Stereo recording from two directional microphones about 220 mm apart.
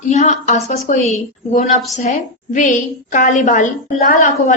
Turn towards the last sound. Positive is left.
turn(degrees=35)  # may be behind; listen again after turning